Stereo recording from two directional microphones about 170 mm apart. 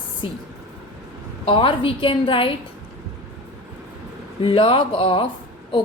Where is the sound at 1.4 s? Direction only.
30° left (ahead or behind).